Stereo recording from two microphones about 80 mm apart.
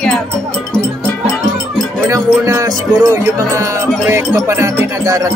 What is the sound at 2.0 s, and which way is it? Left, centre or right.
Music, right.